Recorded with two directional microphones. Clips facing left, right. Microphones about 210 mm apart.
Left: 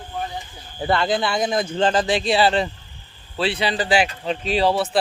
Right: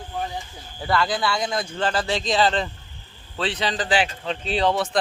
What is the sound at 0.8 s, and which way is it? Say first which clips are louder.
Speech: left 3 dB; 25° left (ahead or behind).